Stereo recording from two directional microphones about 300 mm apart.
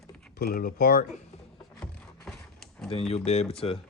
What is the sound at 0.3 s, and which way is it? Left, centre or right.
Speech, left.